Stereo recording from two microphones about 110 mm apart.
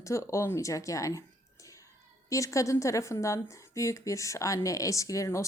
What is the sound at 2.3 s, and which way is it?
A woman's voice, 30° left (ahead or behind).